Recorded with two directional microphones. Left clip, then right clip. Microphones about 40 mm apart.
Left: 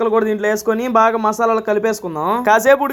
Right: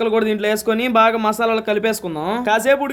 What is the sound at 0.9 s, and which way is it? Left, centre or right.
Speech, left.